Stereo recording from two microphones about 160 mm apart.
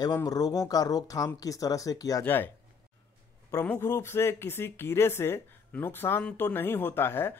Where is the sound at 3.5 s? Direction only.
15° left (ahead or behind).